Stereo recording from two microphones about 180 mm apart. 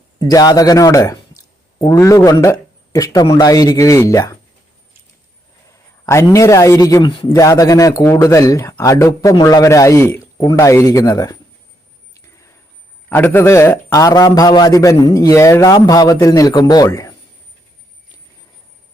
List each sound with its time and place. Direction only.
0.3 s a man's voice: 20° left (ahead or behind)
6.1 s speech: 15° left (ahead or behind)
12.1 s a sound: 15° left (ahead or behind)
13.1 s a man's voice: 10° left (ahead or behind)